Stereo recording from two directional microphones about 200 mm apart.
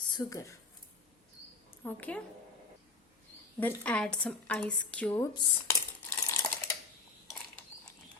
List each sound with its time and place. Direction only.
0.0 s speech: 20° left (ahead or behind)
1.8 s a woman's voice: 10° left (ahead or behind)
3.6 s a woman's voice: 10° left (ahead or behind)
5.3 s dishes: 20° left (ahead or behind)